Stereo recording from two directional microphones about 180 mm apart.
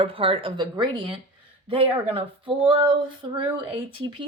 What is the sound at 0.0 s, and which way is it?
Speech, 30° right (ahead or behind).